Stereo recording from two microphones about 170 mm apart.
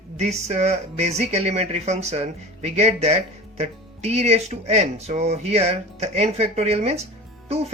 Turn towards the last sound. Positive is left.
turn(degrees=-40)  # may be behind; listen again after turning